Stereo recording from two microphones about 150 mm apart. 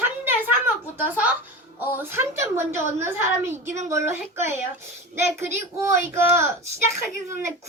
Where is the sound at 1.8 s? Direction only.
15° right (ahead or behind).